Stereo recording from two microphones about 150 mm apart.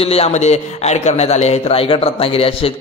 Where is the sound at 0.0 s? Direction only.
40° left (ahead or behind).